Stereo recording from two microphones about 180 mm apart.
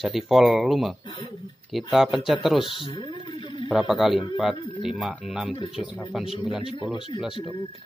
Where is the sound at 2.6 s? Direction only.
30° left (ahead or behind).